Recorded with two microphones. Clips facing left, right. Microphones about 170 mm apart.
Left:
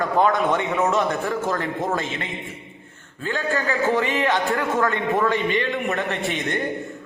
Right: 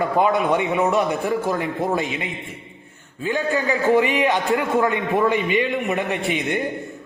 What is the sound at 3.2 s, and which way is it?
A man's voice, 15° right (ahead or behind).